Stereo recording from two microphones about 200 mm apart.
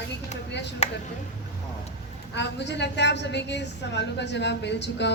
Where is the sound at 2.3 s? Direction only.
60° left (ahead or behind).